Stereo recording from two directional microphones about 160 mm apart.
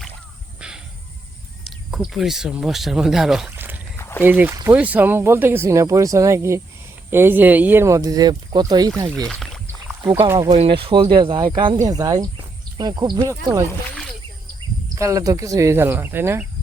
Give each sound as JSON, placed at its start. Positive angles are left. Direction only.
{"t": 0.6, "sound": "a sound", "side_deg": -5}
{"t": 1.6, "sound": "speech", "side_deg": 0}
{"t": 3.9, "sound": "a sound", "side_deg": 15}
{"t": 4.2, "sound": "speech", "side_deg": -10}
{"t": 9.1, "sound": "speech", "side_deg": 5}
{"t": 10.1, "sound": "speech", "side_deg": -15}
{"t": 10.5, "sound": "speech", "side_deg": -40}
{"t": 13.9, "sound": "a sound", "side_deg": 5}
{"t": 14.9, "sound": "speech", "side_deg": -20}